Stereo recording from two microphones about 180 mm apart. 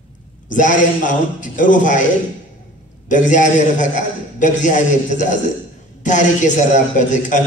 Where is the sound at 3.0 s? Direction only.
45° left (ahead or behind).